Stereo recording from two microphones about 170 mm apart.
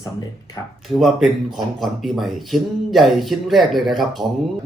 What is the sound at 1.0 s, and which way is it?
Speech, centre (ahead or behind).